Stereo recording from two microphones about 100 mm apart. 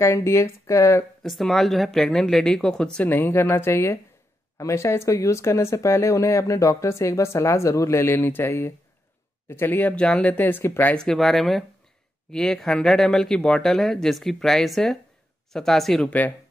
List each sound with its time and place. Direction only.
0.0 s speech: 30° left (ahead or behind)
1.2 s speech: centre (ahead or behind)
3.1 s speech: 20° left (ahead or behind)
11.0 s speech: 5° left (ahead or behind)
16.1 s speech: 15° left (ahead or behind)